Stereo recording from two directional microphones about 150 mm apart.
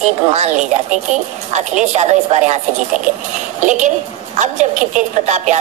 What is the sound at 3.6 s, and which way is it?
A woman's voice, 55° right (ahead or behind).